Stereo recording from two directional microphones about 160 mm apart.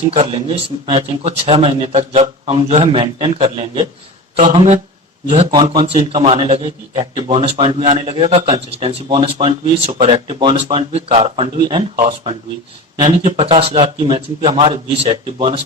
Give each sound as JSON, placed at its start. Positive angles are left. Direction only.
{"t": 0.1, "sound": "a man's voice", "side_deg": -35}